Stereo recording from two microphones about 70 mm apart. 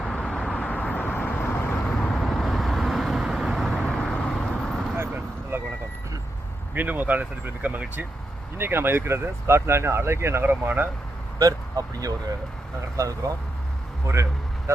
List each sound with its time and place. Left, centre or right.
0.0 s vehicle: centre; by 1.8 s left
1.8 s vehicle: centre
3.7 s vehicle: centre
4.9 s vehicle: right
6.7 s speech: right
11.3 s a man's voice: right